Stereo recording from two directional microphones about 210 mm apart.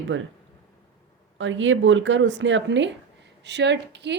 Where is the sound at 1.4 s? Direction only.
65° right (ahead or behind).